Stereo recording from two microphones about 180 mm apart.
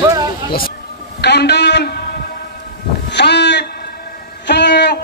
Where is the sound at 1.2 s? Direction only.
70° left (ahead or behind).